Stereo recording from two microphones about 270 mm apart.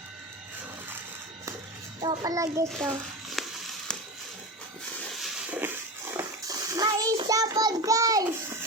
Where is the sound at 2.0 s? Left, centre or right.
Centre.